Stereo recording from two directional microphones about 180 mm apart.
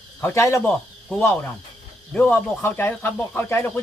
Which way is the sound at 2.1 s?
10° left (ahead or behind).